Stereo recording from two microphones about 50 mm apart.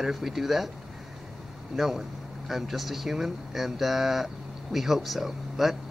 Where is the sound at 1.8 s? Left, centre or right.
Centre.